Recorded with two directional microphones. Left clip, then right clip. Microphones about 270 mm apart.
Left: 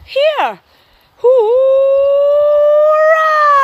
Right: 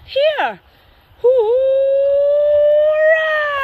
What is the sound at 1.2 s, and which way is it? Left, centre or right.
Howl, centre.